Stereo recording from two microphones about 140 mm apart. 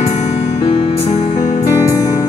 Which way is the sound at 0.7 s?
40° left (ahead or behind).